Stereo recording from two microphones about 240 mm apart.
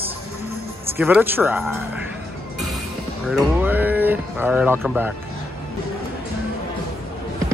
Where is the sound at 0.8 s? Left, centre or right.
Centre.